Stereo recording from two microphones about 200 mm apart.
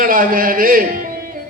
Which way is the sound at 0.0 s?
45° right (ahead or behind).